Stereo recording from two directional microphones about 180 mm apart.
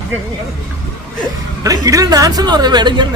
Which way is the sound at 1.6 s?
20° right (ahead or behind).